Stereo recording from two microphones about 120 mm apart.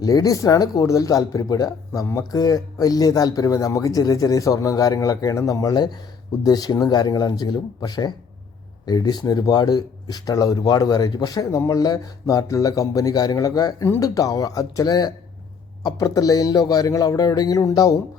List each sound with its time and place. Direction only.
0.0 s speech: 30° left (ahead or behind)